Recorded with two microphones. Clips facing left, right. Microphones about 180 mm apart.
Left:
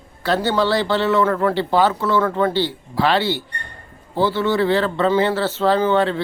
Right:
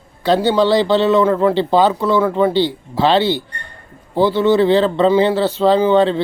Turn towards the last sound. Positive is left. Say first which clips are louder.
# right 4 dB
turn(degrees=-20)  # may be behind; listen again after turning